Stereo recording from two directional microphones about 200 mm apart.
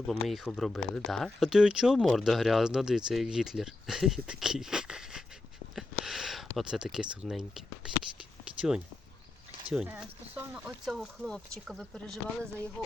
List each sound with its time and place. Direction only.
0.1 s speech: centre (ahead or behind)
5.7 s a sound: centre (ahead or behind)
8.5 s speech: 5° right (ahead or behind)